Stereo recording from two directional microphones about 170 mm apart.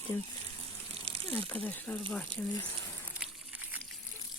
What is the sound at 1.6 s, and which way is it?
Speech, 10° left (ahead or behind).